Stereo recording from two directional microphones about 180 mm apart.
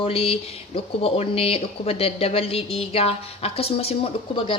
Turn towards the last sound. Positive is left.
turn(degrees=30)  # may be behind; listen again after turning